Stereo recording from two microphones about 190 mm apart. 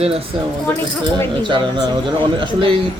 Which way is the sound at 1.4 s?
25° right (ahead or behind).